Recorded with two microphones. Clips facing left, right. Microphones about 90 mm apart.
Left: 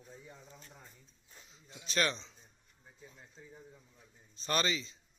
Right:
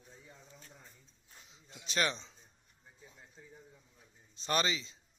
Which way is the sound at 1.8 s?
20° right (ahead or behind).